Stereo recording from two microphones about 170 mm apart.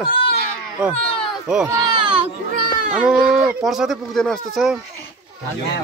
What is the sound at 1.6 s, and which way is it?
Speech, 25° right (ahead or behind).